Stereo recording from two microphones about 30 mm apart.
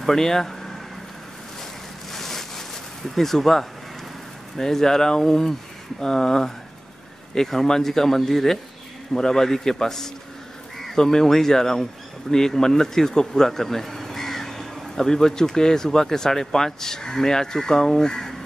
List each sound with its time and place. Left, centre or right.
0.0 s speech: centre
2.1 s a sound: centre
4.6 s speech: centre